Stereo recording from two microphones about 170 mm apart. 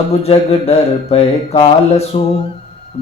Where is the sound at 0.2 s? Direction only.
35° left (ahead or behind).